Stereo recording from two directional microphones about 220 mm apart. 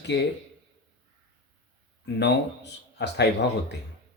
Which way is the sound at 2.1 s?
50° left (ahead or behind).